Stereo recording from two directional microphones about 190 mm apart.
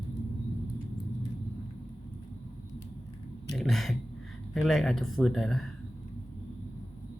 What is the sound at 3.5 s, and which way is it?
Speech, centre (ahead or behind).